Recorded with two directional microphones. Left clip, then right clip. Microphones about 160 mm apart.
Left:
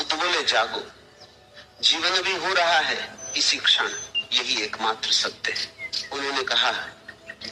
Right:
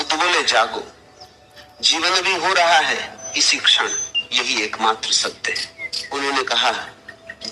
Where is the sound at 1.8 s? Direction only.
35° right (ahead or behind).